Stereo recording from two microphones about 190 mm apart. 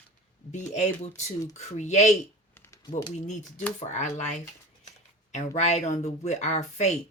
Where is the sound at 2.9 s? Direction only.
40° left (ahead or behind).